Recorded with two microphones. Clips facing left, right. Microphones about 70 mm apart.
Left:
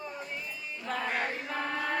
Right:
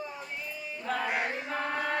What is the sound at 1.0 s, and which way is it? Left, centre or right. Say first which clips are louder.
Chant: even; centre.